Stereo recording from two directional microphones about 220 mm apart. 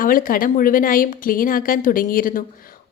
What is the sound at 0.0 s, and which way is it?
A woman's voice, 40° left (ahead or behind).